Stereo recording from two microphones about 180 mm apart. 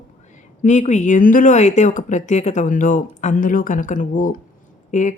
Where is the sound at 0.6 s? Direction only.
40° left (ahead or behind).